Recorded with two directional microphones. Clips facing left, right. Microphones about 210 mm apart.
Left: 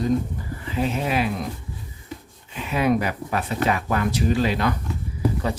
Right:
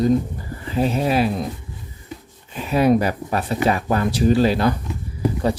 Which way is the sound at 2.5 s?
40° right (ahead or behind).